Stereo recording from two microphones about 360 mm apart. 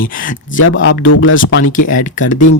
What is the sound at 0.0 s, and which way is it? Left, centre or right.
Speech, left.